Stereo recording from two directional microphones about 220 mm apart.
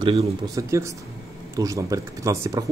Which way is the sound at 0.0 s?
25° right (ahead or behind).